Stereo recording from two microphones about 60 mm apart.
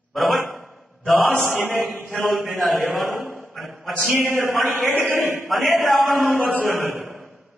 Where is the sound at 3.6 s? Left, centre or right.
Centre.